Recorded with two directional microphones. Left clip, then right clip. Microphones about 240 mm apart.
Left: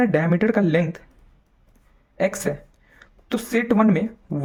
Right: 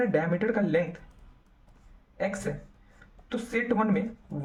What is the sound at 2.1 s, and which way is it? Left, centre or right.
Speech, left.